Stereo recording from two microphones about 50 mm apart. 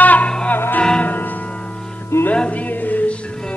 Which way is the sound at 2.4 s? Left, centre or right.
Left.